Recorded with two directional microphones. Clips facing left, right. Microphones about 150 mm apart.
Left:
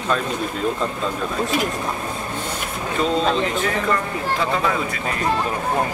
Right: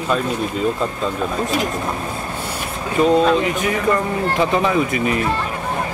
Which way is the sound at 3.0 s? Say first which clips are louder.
Right 6 dB; 10° right (ahead or behind).